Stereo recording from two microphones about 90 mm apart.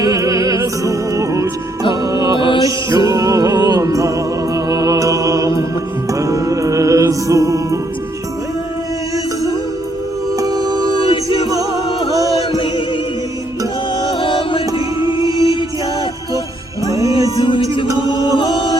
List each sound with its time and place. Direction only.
0.0 s music: 45° right (ahead or behind)
2.6 s music: 45° right (ahead or behind)
10.3 s music: 45° right (ahead or behind)
12.1 s chant: 40° right (ahead or behind)
14.1 s music: 70° left (ahead or behind)
14.7 s music: 45° right (ahead or behind)
16.8 s music: 40° right (ahead or behind)
17.4 s chant: 65° left (ahead or behind)